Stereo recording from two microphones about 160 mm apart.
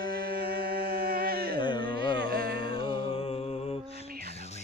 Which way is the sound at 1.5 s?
30° left (ahead or behind).